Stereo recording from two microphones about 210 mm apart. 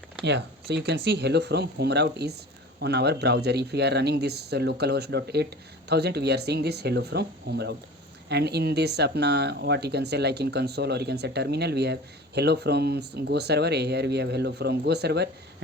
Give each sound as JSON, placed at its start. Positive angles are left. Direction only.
{"t": 0.3, "sound": "speech", "side_deg": -55}